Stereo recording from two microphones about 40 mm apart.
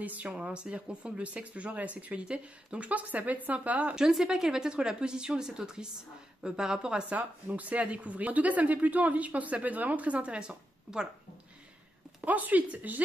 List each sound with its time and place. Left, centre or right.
0.0 s speech: right
0.3 s speech: right
4.3 s a woman's voice: centre
7.1 s speech: right
12.3 s speech: right